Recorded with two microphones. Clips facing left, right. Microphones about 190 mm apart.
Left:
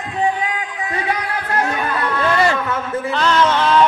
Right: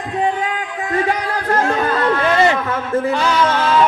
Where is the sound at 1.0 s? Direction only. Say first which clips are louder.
Right 3 dB; 40° right (ahead or behind).